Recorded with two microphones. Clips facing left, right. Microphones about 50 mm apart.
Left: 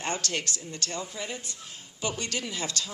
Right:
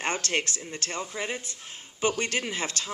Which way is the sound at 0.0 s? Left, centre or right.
Right.